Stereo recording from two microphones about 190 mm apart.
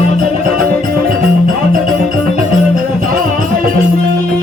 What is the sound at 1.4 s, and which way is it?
Music, 45° right (ahead or behind).